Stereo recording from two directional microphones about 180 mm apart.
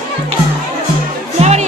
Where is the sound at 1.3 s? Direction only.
35° right (ahead or behind).